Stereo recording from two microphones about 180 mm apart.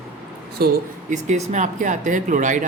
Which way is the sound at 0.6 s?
60° right (ahead or behind).